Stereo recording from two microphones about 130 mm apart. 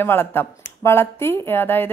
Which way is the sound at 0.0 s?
15° left (ahead or behind).